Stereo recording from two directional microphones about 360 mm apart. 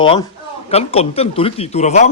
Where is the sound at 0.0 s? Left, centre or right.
Centre.